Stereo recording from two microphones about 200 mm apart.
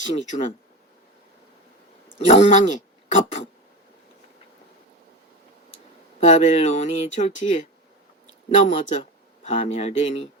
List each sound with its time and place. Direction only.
0.0 s speech: 40° left (ahead or behind)
2.1 s speech: 35° left (ahead or behind)
6.1 s speech: 35° left (ahead or behind)